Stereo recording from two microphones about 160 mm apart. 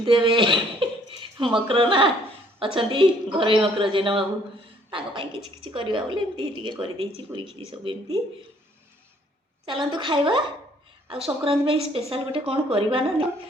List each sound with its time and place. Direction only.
0.0 s a woman's voice: 30° right (ahead or behind)
9.6 s a woman's voice: 30° right (ahead or behind)